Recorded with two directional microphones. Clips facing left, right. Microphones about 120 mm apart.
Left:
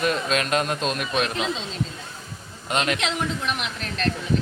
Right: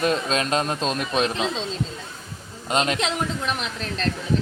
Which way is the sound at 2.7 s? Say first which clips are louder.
Right 2 dB; 30° right (ahead or behind).